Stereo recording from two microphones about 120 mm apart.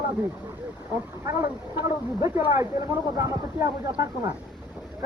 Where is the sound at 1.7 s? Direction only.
20° right (ahead or behind).